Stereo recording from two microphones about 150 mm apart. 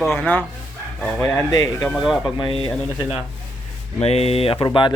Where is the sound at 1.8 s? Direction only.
Centre (ahead or behind).